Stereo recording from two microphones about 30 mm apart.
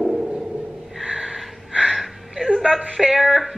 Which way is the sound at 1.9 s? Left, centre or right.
Centre.